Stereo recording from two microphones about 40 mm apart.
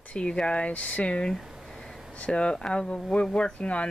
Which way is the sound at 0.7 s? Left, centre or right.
Left.